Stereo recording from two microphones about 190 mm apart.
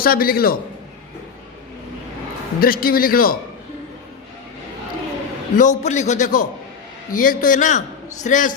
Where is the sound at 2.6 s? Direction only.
50° left (ahead or behind).